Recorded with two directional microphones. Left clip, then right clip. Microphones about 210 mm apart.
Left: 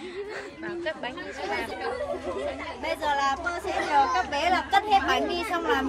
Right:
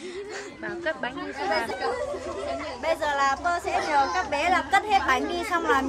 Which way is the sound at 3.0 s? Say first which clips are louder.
Even; 10° right (ahead or behind).